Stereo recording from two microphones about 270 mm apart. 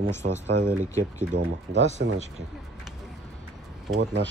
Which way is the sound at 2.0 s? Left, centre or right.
Right.